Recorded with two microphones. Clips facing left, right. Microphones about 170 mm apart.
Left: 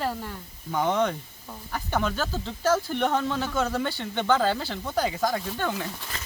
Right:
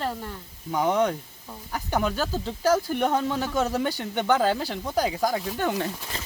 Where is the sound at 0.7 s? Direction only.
10° right (ahead or behind).